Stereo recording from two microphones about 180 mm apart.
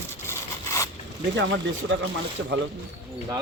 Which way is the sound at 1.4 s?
90° right.